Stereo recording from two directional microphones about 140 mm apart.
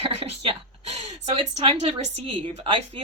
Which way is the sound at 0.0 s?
45° right (ahead or behind).